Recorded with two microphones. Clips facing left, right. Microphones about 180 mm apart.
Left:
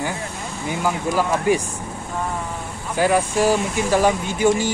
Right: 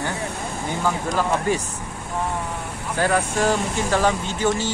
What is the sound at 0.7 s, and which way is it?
Speech, 10° left (ahead or behind).